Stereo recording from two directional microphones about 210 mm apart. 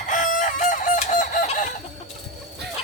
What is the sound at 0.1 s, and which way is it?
Chicken, 35° left (ahead or behind).